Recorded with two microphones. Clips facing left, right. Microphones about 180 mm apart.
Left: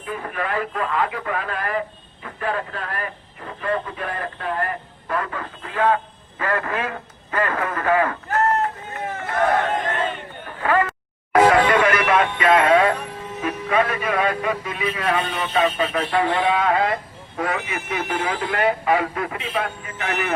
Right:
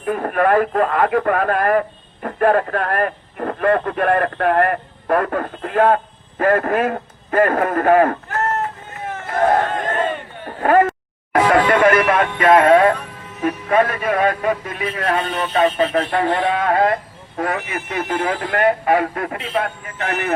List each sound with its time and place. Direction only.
0.0 s speech: 55° right (ahead or behind)
10.6 s a sound: 50° right (ahead or behind)
11.5 s music: 50° right (ahead or behind)
13.4 s speech: 50° right (ahead or behind)